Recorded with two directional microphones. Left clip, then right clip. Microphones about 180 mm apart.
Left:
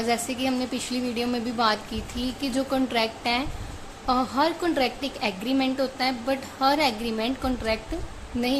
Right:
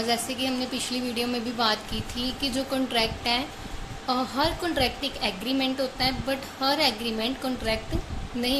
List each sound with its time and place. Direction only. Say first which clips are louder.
0.1 s a woman's voice: left 3 dB; 25° left (ahead or behind)